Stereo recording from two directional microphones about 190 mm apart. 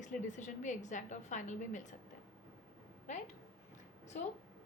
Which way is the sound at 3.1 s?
40° left (ahead or behind).